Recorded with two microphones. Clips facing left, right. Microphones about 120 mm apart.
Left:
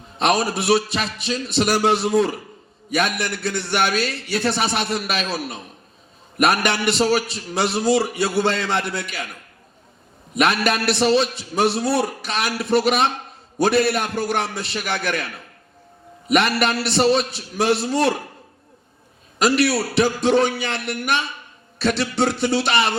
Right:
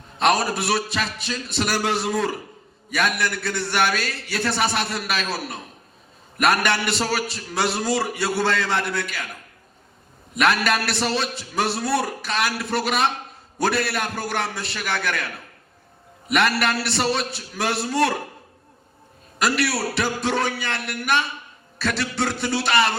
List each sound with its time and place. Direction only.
0.2 s a man's voice: 25° left (ahead or behind)
10.4 s a man's voice: 25° left (ahead or behind)
16.3 s a man's voice: 25° left (ahead or behind)
19.4 s a man's voice: 25° left (ahead or behind)